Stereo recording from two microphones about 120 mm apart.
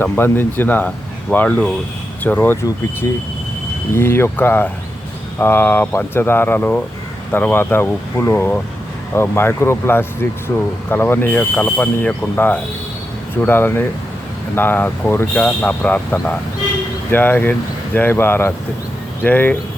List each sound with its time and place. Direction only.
0.0 s speech: 15° left (ahead or behind)
3.9 s speech: 20° left (ahead or behind)
17.1 s speech: 15° left (ahead or behind)